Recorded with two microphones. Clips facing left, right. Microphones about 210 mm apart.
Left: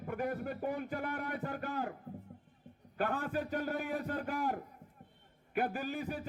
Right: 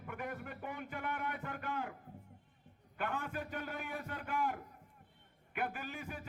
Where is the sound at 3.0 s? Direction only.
35° left (ahead or behind).